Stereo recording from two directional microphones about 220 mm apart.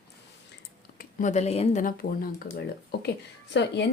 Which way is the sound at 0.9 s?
35° left (ahead or behind).